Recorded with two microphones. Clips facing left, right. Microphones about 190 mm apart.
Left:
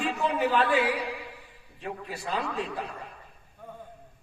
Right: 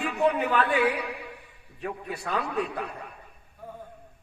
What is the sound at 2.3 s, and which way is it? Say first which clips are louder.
Speech: right 2 dB; 65° right (ahead or behind).